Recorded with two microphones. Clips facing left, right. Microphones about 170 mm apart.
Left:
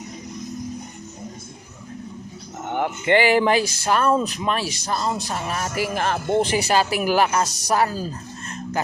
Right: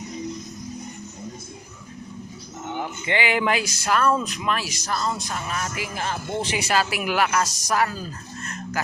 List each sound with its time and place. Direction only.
2.6 s a sound: 60° left (ahead or behind)
3.2 s a woman's voice: 35° left (ahead or behind)
5.9 s speech: 65° left (ahead or behind)
6.5 s a woman's voice: 35° left (ahead or behind)